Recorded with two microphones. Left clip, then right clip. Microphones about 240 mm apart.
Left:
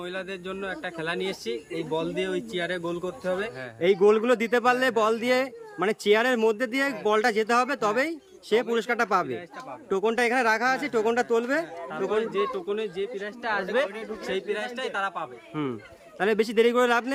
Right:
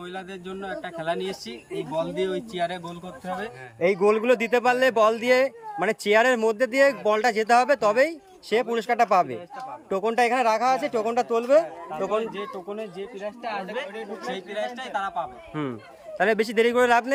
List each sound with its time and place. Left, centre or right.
0.0 s speech: centre
3.8 s speech: centre
12.0 s speech: centre
15.6 s speech: centre